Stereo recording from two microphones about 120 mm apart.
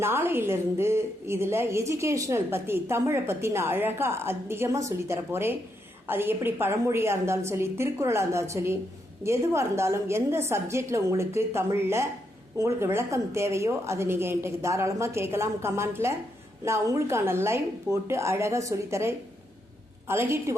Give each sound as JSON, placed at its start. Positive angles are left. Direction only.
{"t": 0.0, "sound": "a woman's voice", "side_deg": -20}